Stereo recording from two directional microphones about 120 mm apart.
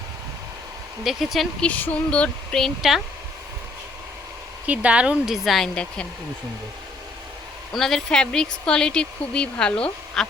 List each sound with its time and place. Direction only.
1.0 s speech: centre (ahead or behind)
1.6 s speech: 10° left (ahead or behind)
4.6 s speech: 10° right (ahead or behind); by 6.1 s 10° left (ahead or behind)
7.7 s speech: centre (ahead or behind)